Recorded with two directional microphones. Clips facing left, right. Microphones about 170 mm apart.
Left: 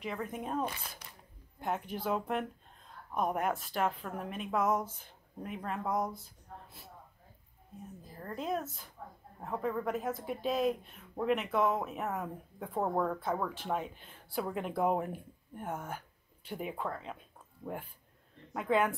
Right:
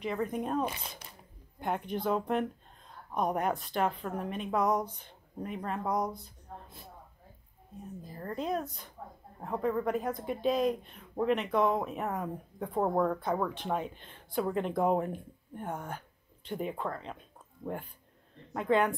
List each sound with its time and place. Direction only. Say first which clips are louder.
0.0 s speech: right 5 dB; centre (ahead or behind)
0.7 s speech: right 3 dB; 20° right (ahead or behind)
1.6 s speech: right 3 dB; 5° left (ahead or behind)
8.2 s speech: right 2 dB; centre (ahead or behind)
18.5 s speech: right 2 dB; 5° left (ahead or behind)